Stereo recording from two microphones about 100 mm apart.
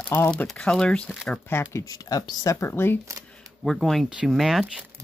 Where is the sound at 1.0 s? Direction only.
Centre (ahead or behind).